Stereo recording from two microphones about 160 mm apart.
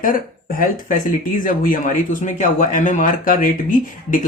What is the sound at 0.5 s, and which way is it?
Speech, 55° left (ahead or behind).